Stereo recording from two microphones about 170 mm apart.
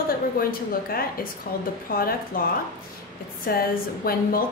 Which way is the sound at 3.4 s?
60° left (ahead or behind).